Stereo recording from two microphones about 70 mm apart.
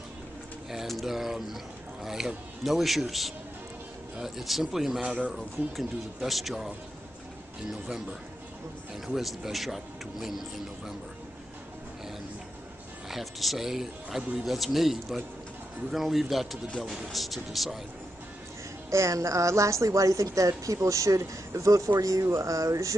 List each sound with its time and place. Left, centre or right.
0.7 s speech: centre
7.7 s a man's voice: centre
13.1 s speech: centre
18.9 s a woman's voice: right